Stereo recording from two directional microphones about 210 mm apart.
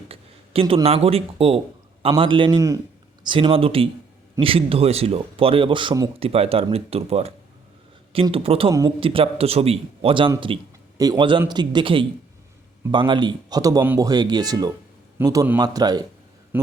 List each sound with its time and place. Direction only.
0.1 s a man's voice: 25° right (ahead or behind)